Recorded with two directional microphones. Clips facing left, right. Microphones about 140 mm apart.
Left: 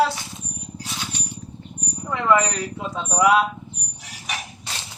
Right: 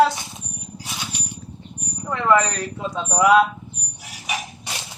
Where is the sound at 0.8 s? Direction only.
15° right (ahead or behind).